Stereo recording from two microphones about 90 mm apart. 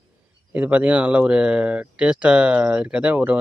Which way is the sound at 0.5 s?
15° right (ahead or behind).